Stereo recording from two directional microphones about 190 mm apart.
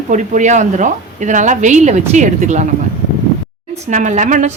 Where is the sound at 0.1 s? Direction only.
40° right (ahead or behind).